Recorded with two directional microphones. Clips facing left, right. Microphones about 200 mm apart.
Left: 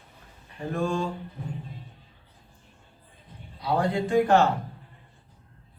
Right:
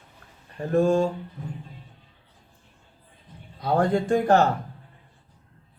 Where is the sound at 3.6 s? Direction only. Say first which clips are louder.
Right 3 dB; 50° right (ahead or behind).